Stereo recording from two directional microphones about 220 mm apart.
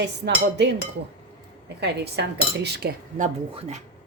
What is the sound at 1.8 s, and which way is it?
Dishes, 50° right (ahead or behind).